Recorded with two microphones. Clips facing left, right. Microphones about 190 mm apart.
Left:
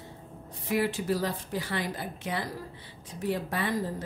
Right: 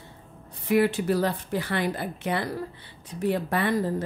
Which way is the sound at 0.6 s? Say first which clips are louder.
Right 6 dB; 65° right (ahead or behind).